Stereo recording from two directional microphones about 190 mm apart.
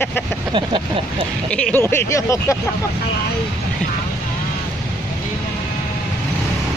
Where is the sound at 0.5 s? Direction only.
25° right (ahead or behind).